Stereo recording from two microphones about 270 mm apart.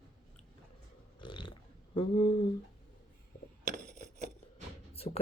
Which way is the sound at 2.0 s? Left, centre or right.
Centre.